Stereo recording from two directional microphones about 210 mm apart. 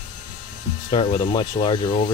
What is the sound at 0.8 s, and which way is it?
Speech, 20° left (ahead or behind).